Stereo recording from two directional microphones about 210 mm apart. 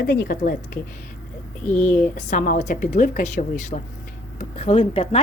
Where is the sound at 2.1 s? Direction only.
40° left (ahead or behind).